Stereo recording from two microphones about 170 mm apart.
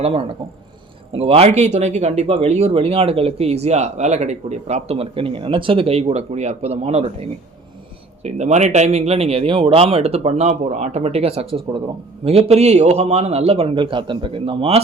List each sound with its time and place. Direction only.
0.0 s speech: 35° right (ahead or behind)